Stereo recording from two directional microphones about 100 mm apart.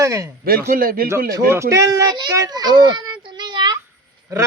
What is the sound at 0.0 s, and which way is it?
A man's voice, 35° right (ahead or behind).